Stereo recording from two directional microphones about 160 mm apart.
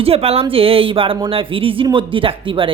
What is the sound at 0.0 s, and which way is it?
Speech, 40° right (ahead or behind).